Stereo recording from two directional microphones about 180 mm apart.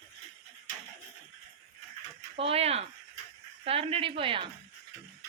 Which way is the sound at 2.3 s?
30° right (ahead or behind).